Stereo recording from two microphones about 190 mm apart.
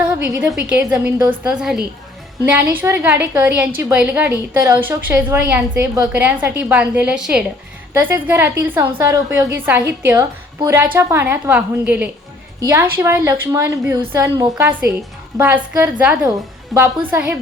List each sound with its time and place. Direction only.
0.4 s a woman's voice: 5° right (ahead or behind)
0.9 s a woman's voice: 15° right (ahead or behind)
1.5 s a woman's voice: 5° right (ahead or behind)